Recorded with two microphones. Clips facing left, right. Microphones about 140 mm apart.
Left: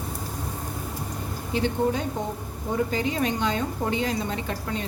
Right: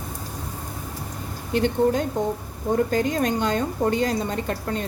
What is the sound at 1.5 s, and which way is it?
A woman's voice, 55° right (ahead or behind).